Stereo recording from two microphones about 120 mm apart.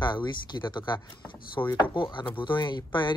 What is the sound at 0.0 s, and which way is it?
Speech, 40° left (ahead or behind).